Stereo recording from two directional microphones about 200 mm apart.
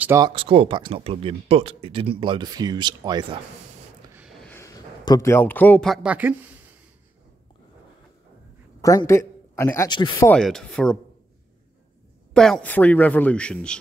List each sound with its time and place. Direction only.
0.0 s speech: 10° right (ahead or behind)
0.3 s speech: 25° right (ahead or behind)
4.4 s a man's voice: 10° left (ahead or behind); by 6.6 s 10° right (ahead or behind)
8.8 s a man's voice: 15° left (ahead or behind)
10.3 s speech: 5° left (ahead or behind)
12.4 s speech: 5° left (ahead or behind)